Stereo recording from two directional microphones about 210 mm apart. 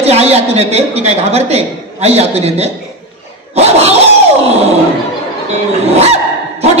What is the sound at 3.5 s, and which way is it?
Dog, 30° right (ahead or behind).